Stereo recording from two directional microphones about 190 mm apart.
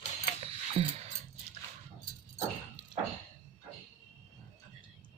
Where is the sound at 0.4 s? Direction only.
30° right (ahead or behind).